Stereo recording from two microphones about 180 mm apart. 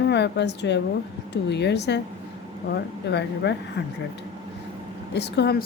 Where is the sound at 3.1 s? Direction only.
70° left (ahead or behind).